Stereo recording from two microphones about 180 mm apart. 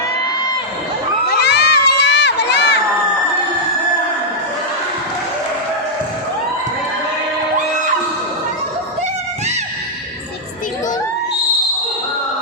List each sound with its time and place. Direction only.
1.3 s crowd: 65° left (ahead or behind)